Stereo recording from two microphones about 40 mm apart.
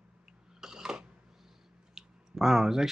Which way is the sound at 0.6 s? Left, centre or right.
Centre.